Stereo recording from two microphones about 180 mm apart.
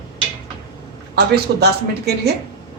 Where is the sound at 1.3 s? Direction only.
65° right (ahead or behind).